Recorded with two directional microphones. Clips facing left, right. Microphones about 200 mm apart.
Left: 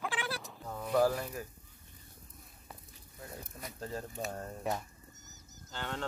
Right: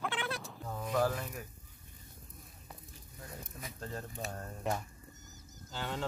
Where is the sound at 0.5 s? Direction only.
Centre (ahead or behind).